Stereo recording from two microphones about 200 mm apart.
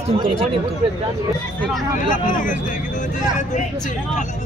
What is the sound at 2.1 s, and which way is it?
Speech, 40° left (ahead or behind).